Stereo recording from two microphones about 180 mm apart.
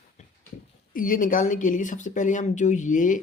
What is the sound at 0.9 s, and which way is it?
Speech, 50° left (ahead or behind).